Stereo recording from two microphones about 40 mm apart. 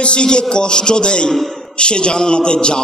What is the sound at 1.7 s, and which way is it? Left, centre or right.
A man's voice, left.